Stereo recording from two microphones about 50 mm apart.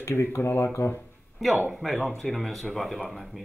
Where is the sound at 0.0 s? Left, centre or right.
Left.